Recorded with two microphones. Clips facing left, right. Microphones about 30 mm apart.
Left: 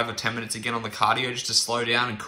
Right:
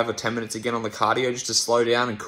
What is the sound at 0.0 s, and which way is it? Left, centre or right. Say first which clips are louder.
Speech: right 2 dB; left.